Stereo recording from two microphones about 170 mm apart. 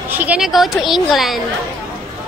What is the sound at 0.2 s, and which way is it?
A woman's voice, 5° right (ahead or behind).